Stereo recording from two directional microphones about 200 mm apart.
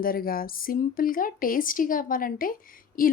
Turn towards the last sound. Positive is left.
turn(degrees=45)  # may be behind; listen again after turning